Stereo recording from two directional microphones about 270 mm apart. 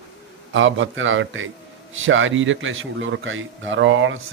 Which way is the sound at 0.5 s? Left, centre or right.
Right.